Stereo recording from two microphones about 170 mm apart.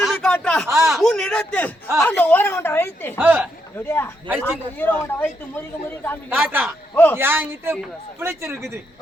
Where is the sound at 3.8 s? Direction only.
15° left (ahead or behind).